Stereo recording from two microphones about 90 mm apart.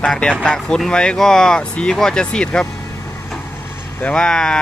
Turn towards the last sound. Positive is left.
turn(degrees=10)  # may be behind; listen again after turning